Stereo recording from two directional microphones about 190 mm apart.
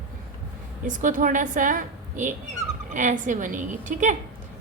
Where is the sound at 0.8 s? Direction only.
45° right (ahead or behind).